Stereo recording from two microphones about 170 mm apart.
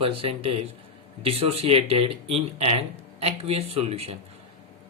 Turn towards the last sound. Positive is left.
turn(degrees=-35)  # may be behind; listen again after turning